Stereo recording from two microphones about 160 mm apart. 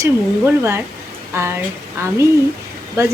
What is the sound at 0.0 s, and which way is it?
Speech, 15° right (ahead or behind).